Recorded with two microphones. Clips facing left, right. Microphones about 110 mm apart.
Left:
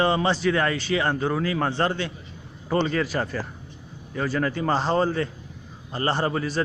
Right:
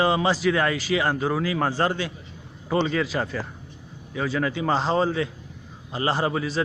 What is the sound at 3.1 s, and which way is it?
A man's voice, centre (ahead or behind).